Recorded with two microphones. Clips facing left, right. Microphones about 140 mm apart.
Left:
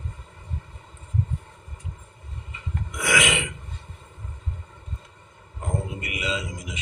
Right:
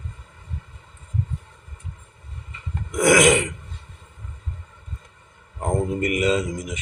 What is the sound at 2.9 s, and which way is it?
Speech, 45° right (ahead or behind).